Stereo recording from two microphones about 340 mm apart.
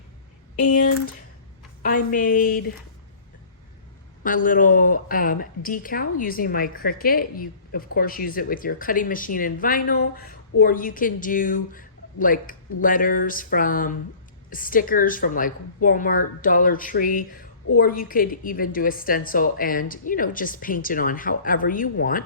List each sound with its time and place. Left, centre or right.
2.0 s a woman's voice: left
4.2 s a woman's voice: left